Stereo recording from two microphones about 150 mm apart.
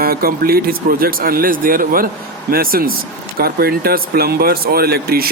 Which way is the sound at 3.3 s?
90° right.